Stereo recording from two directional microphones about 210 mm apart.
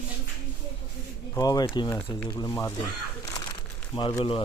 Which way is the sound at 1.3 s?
20° left (ahead or behind).